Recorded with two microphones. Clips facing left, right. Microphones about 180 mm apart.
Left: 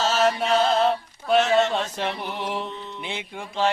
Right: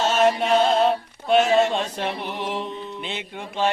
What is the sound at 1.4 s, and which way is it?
Speech, 10° right (ahead or behind).